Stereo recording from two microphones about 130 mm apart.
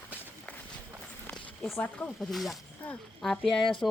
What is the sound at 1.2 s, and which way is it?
A woman's voice, 5° left (ahead or behind).